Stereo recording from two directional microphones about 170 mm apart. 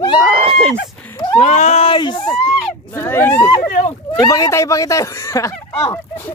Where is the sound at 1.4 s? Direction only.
45° left (ahead or behind); by 2.2 s 25° left (ahead or behind).